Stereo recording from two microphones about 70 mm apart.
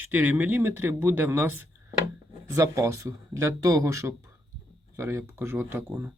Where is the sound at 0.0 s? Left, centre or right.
Right.